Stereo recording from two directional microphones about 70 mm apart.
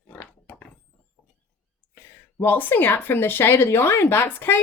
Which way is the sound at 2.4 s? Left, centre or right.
Left.